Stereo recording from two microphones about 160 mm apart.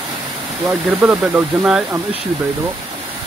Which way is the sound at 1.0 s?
10° right (ahead or behind).